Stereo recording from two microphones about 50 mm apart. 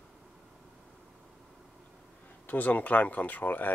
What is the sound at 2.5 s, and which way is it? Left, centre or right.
Speech, left.